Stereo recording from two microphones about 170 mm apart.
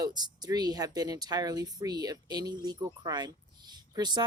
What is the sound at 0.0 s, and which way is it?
Speech, 25° right (ahead or behind).